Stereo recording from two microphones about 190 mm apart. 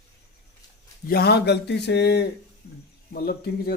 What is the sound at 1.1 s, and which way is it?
Speech, 55° left (ahead or behind).